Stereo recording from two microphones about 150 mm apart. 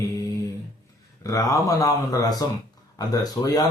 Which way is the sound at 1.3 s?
20° left (ahead or behind).